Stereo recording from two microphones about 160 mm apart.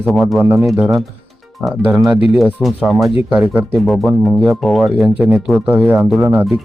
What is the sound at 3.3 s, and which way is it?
Speech, 10° right (ahead or behind).